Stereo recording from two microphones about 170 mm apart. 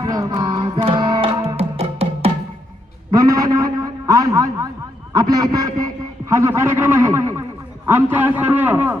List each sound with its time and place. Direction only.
0.0 s music: 20° right (ahead or behind)
1.5 s music: 35° right (ahead or behind)
3.1 s a sound: 20° right (ahead or behind)
5.1 s a man's voice: 20° right (ahead or behind)